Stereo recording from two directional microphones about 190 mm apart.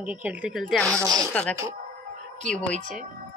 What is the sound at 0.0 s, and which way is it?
Speech, 5° right (ahead or behind).